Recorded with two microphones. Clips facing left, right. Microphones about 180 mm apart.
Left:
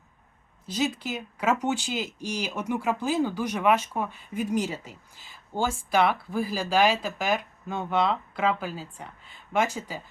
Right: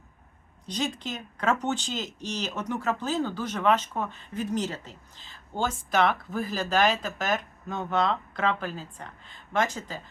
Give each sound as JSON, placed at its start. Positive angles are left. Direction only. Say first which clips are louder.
{"t": 0.6, "sound": "speech", "louder": "left 3 dB", "side_deg": 5}